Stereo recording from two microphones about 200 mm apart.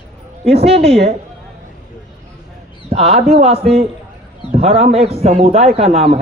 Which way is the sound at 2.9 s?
30° right (ahead or behind).